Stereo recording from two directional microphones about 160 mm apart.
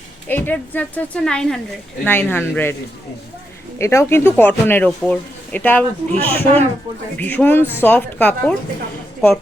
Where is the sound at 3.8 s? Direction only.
15° left (ahead or behind).